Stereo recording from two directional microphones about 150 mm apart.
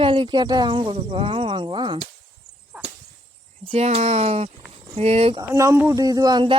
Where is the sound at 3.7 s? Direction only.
45° right (ahead or behind).